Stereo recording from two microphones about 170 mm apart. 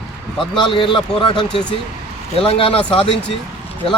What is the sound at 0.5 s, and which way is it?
Speech, 30° left (ahead or behind).